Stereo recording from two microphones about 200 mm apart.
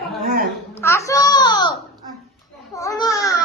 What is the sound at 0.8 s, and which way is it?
Speech, 15° left (ahead or behind).